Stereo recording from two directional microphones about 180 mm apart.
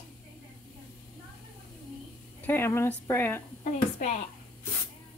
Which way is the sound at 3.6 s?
40° left (ahead or behind).